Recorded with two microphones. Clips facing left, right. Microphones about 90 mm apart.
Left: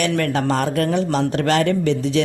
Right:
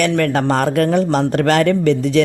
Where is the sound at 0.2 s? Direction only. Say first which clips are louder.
Right 4 dB; 50° right (ahead or behind).